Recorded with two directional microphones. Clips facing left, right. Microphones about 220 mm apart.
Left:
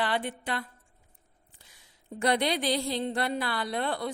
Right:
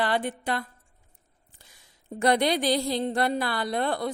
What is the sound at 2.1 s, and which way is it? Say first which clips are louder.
Speech: right 4 dB; 45° right (ahead or behind).